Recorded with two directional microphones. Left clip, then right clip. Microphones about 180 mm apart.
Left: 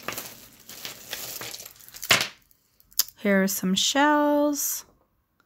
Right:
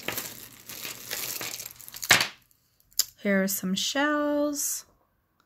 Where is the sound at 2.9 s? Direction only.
20° left (ahead or behind).